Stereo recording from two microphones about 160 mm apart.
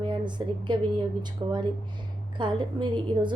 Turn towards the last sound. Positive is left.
turn(degrees=-30)  # may be behind; listen again after turning